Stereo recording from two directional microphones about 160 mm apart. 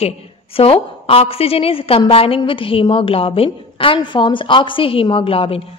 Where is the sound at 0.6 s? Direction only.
35° left (ahead or behind).